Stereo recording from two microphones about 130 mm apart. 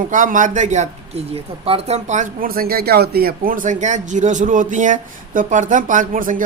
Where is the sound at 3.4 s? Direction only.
90° right.